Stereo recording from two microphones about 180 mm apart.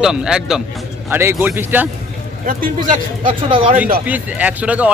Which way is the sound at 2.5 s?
50° right (ahead or behind).